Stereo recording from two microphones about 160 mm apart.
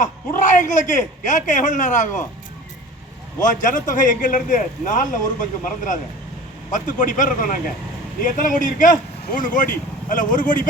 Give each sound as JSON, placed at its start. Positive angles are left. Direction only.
{"t": 0.0, "sound": "a man's voice", "side_deg": 50}
{"t": 3.4, "sound": "a man's voice", "side_deg": 55}